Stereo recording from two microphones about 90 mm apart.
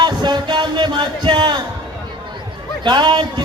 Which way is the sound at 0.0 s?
55° right (ahead or behind).